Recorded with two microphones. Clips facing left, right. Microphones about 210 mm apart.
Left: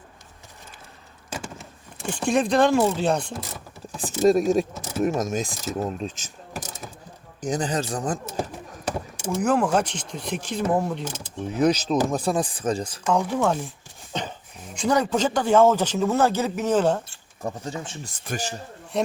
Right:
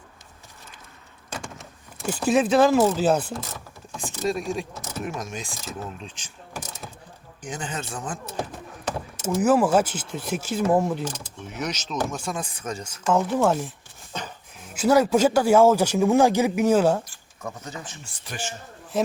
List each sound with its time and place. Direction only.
1.3 s speech: 5° left (ahead or behind)
3.9 s speech: 40° left (ahead or behind)
7.4 s speech: 35° left (ahead or behind)
9.2 s speech: 5° right (ahead or behind)
11.1 s speech: 35° left (ahead or behind)
13.1 s speech: 5° right (ahead or behind)
14.1 s a sound: 20° left (ahead or behind)
14.6 s speech: 5° right (ahead or behind)
17.1 s speech: 30° left (ahead or behind)
18.9 s speech: 5° right (ahead or behind)